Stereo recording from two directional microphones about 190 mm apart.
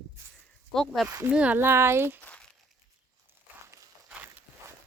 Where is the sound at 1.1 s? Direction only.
15° right (ahead or behind).